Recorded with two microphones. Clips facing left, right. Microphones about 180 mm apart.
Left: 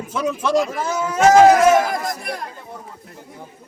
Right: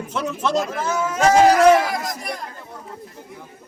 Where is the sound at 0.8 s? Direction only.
35° left (ahead or behind).